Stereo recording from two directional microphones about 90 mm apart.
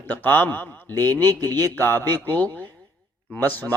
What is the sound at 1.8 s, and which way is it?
A man's voice, 25° left (ahead or behind).